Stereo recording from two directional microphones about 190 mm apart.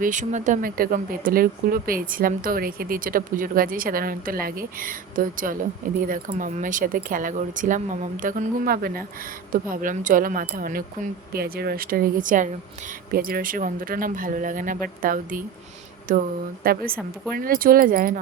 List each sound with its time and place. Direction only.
0.0 s speech: 40° right (ahead or behind)